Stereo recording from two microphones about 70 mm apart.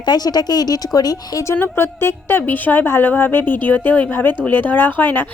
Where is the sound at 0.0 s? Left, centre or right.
Left.